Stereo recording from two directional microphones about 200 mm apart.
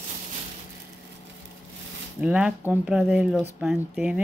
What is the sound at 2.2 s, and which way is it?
Speech, 5° right (ahead or behind).